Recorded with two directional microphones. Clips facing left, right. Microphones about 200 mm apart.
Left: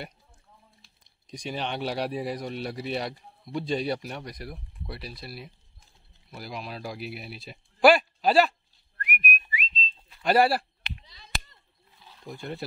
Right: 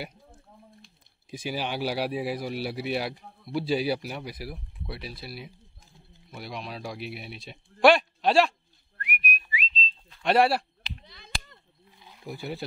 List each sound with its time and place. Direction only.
0.8 s speech: 5° right (ahead or behind)
9.0 s whistling: 45° left (ahead or behind)
10.0 s speech: 5° left (ahead or behind)
11.1 s chop: 55° right (ahead or behind)
12.0 s a sound: 15° right (ahead or behind)